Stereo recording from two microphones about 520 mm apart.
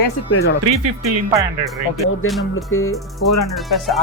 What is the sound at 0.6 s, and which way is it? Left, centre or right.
Speech, right.